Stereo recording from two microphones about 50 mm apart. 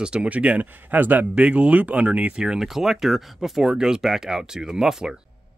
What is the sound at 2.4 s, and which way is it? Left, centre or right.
Speech, centre.